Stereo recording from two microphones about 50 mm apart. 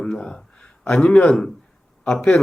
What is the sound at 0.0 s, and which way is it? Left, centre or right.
A man's voice, centre.